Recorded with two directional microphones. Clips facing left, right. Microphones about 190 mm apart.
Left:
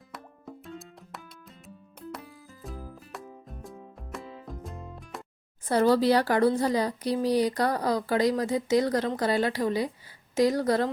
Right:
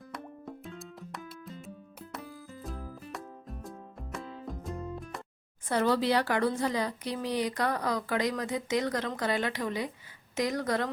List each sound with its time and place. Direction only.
0.1 s music: centre (ahead or behind)
5.6 s speech: 35° left (ahead or behind)